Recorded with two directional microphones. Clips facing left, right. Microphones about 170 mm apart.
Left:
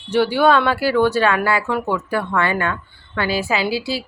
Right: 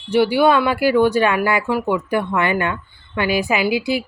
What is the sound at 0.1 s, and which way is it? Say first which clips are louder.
Speech: right 1 dB; 10° right (ahead or behind).